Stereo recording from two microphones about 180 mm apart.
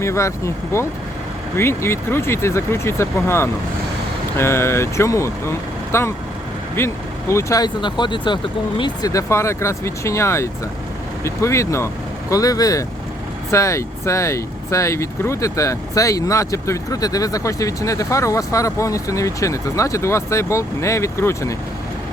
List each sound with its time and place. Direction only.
0.0 s speech: 15° left (ahead or behind)